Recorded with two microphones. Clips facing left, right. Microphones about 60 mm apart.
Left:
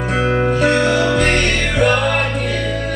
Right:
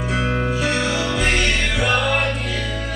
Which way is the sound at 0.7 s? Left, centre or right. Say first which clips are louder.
Left 7 dB; centre.